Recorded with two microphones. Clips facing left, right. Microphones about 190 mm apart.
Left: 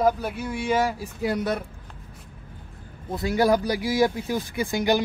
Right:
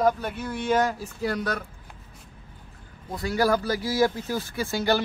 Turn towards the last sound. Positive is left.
turn(degrees=15)  # may be behind; listen again after turning